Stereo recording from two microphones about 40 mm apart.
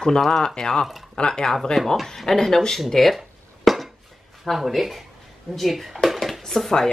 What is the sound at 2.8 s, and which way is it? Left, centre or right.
Dishes, centre.